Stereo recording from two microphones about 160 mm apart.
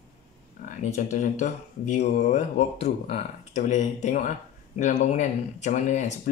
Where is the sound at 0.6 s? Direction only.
50° left (ahead or behind).